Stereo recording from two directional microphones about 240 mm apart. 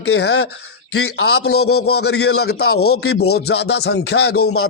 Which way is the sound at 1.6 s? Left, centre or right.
Left.